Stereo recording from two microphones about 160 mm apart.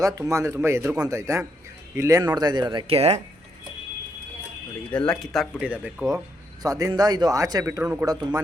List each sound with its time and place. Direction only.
0.0 s speech: 20° right (ahead or behind); by 3.2 s 40° right (ahead or behind)
4.9 s speech: 5° left (ahead or behind); by 6.1 s 10° right (ahead or behind)
6.6 s speech: 20° right (ahead or behind)